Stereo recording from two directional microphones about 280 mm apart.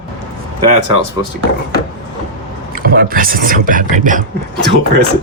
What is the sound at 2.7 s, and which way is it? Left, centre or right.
Speech, right.